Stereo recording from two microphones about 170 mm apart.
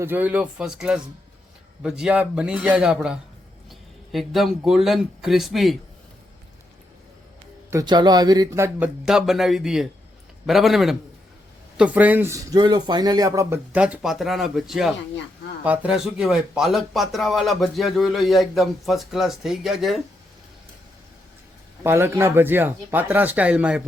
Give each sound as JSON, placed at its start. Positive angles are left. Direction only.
{"t": 0.0, "sound": "speech", "side_deg": -10}
{"t": 7.7, "sound": "speech", "side_deg": -20}
{"t": 9.0, "sound": "speech", "side_deg": 0}
{"t": 13.7, "sound": "speech", "side_deg": -5}
{"t": 21.8, "sound": "speech", "side_deg": -15}